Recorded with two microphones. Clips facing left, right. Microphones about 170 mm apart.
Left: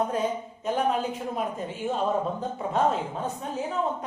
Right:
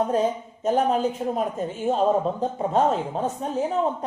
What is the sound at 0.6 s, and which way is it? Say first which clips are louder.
Speech: right 5 dB; 40° right (ahead or behind).